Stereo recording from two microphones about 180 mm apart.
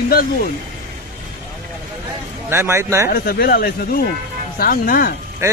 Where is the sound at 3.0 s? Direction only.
60° left (ahead or behind).